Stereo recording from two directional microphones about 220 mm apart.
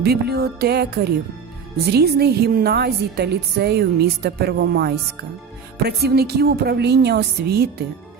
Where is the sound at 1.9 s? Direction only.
45° right (ahead or behind).